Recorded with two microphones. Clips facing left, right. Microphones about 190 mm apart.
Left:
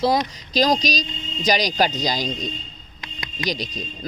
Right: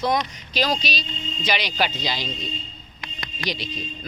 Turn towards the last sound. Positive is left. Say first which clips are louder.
# left 3 dB
turn(degrees=40)  # may be behind; listen again after turning